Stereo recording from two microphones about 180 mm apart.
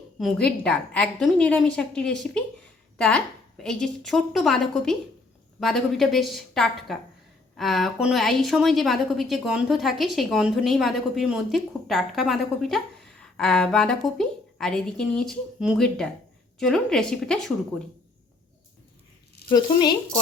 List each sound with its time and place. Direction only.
0.2 s a woman's voice: 5° left (ahead or behind)
19.5 s speech: 25° left (ahead or behind)